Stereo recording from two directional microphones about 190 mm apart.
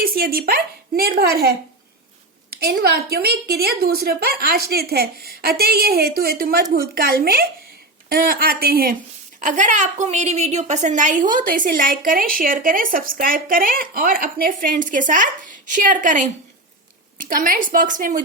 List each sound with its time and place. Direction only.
0.0 s a woman's voice: 50° right (ahead or behind)